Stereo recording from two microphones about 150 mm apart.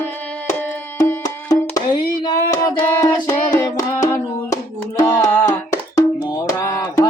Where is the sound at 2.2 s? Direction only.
25° left (ahead or behind).